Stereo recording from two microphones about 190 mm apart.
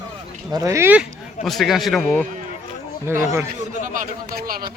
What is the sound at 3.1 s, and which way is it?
Speech, 15° right (ahead or behind).